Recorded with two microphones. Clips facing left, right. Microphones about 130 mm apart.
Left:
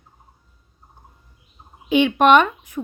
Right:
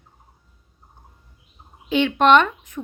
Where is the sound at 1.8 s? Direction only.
15° left (ahead or behind).